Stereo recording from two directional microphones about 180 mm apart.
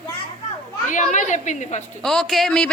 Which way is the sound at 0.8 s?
45° left (ahead or behind).